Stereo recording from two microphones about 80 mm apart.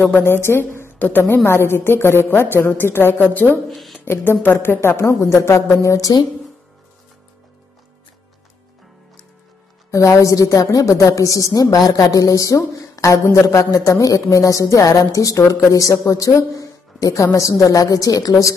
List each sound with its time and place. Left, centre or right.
0.0 s a woman's voice: left
3.6 s a sound: centre
4.0 s a woman's voice: left
9.8 s a woman's voice: left